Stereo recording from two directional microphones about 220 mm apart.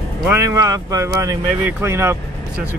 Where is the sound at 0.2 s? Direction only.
10° right (ahead or behind).